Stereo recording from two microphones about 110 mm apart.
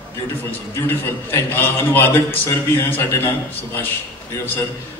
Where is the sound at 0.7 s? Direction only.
25° left (ahead or behind).